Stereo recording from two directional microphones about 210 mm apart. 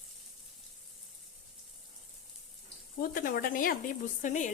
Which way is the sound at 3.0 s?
40° left (ahead or behind).